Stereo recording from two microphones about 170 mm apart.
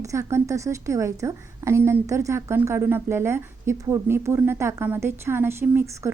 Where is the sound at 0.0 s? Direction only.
20° right (ahead or behind).